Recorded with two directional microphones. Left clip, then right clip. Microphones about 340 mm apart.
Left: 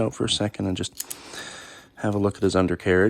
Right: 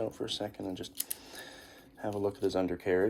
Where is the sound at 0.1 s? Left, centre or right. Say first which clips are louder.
Left 11 dB; left.